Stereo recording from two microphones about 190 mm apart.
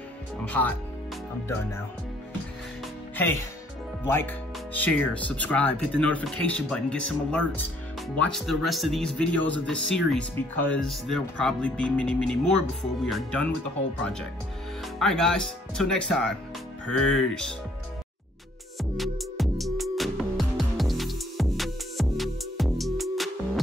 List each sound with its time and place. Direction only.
0.5 s speech: 10° left (ahead or behind)
3.2 s speech: 10° left (ahead or behind)
15.0 s speech: centre (ahead or behind)
18.8 s music: centre (ahead or behind)